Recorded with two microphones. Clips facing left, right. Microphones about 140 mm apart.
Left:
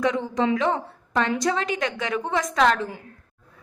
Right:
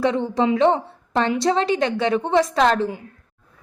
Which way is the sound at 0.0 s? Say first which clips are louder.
Right 3 dB; 30° right (ahead or behind).